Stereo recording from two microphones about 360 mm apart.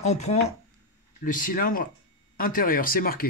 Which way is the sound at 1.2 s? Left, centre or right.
Left.